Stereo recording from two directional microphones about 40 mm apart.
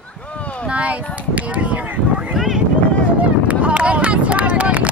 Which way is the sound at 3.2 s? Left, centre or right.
Right.